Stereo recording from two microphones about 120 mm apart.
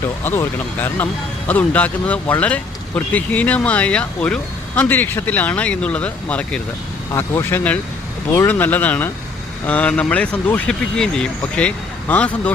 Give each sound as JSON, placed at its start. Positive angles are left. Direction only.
{"t": 0.3, "sound": "speech", "side_deg": 20}
{"t": 7.1, "sound": "speech", "side_deg": 25}
{"t": 7.5, "sound": "speech", "side_deg": 10}